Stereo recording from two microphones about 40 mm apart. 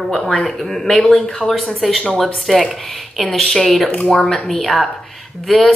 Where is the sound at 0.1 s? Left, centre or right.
Centre.